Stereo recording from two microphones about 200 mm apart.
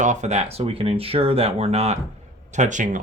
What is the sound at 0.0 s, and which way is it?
Speech, 35° right (ahead or behind).